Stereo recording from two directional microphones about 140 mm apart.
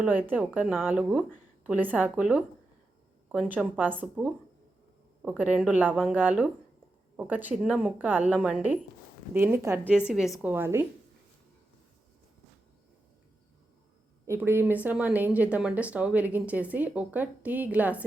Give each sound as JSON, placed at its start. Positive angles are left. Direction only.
{"t": 0.0, "sound": "speech", "side_deg": -15}
{"t": 10.1, "sound": "a woman's voice", "side_deg": 0}
{"t": 10.5, "sound": "speech", "side_deg": -15}
{"t": 14.3, "sound": "speech", "side_deg": -15}